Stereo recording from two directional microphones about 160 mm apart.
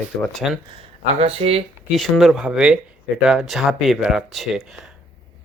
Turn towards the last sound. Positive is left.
turn(degrees=-5)  # may be behind; listen again after turning